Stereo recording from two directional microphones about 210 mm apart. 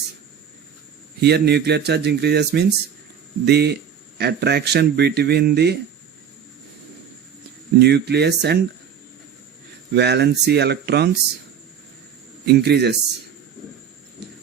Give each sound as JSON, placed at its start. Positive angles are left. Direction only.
{"t": 1.2, "sound": "speech", "side_deg": -50}
{"t": 7.8, "sound": "speech", "side_deg": -50}
{"t": 9.9, "sound": "speech", "side_deg": -50}
{"t": 12.5, "sound": "speech", "side_deg": -50}